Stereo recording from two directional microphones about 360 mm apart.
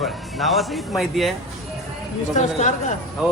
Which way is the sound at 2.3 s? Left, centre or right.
Centre.